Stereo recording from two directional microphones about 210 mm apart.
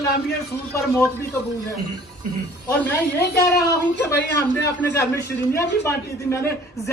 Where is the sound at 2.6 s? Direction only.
10° left (ahead or behind).